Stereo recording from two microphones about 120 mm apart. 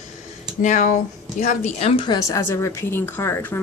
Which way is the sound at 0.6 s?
90° left.